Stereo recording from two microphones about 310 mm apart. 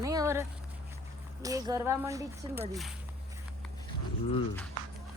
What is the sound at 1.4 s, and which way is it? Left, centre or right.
Speech, centre.